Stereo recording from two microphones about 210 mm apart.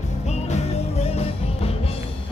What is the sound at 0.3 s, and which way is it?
Music, 30° left (ahead or behind).